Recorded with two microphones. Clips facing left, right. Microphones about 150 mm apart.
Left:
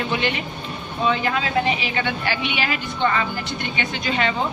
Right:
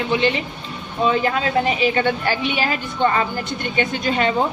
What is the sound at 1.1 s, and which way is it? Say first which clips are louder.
A woman's voice: right 3 dB; 40° right (ahead or behind).